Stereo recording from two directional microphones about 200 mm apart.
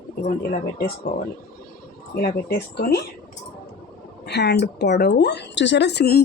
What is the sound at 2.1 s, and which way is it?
Speech, 50° left (ahead or behind).